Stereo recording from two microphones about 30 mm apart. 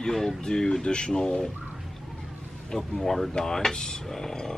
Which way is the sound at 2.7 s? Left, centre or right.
Centre.